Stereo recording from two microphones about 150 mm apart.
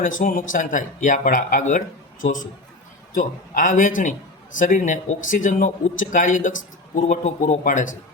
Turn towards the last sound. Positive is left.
turn(degrees=55)  # may be behind; listen again after turning